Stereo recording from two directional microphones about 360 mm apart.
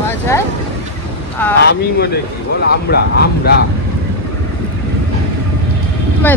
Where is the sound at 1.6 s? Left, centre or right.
Left.